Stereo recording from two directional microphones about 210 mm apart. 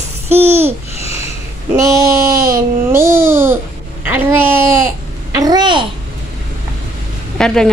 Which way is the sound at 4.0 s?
10° right (ahead or behind).